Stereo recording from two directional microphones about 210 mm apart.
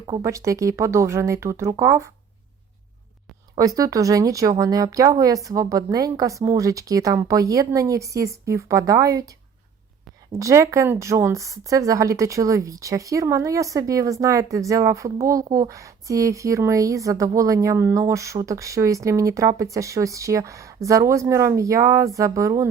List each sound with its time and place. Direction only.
0.2 s speech: 15° right (ahead or behind)
3.6 s speech: 15° right (ahead or behind)
10.3 s speech: 15° right (ahead or behind)